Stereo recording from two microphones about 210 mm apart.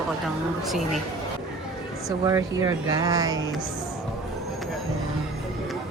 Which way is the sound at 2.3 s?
15° right (ahead or behind).